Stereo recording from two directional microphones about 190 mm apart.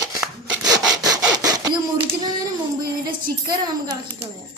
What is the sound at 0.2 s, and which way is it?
Sawing, 5° right (ahead or behind).